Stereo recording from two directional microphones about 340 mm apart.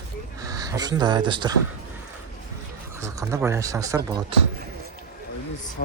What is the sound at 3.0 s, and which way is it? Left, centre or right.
Speech, centre.